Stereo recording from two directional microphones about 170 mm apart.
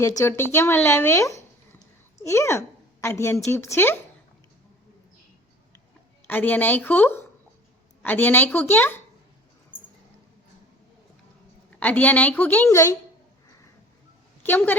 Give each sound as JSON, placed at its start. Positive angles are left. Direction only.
{"t": 0.0, "sound": "a woman's voice", "side_deg": 20}
{"t": 6.2, "sound": "speech", "side_deg": 10}
{"t": 11.8, "sound": "speech", "side_deg": 10}
{"t": 14.4, "sound": "speech", "side_deg": 10}